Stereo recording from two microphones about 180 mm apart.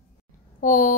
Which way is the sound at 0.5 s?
45° left (ahead or behind).